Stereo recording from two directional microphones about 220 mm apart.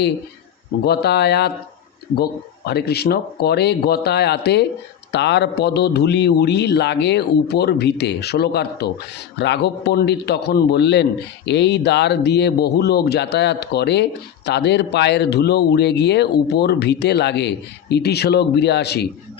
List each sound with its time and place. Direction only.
0.9 s speech: 50° left (ahead or behind)
2.6 s speech: 50° left (ahead or behind)